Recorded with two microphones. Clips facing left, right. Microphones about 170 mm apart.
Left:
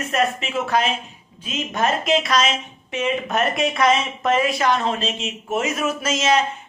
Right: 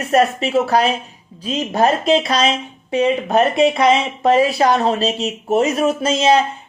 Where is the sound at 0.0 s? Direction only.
40° right (ahead or behind).